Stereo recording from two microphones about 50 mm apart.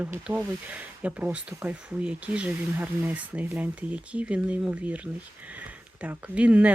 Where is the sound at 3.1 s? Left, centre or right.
Right.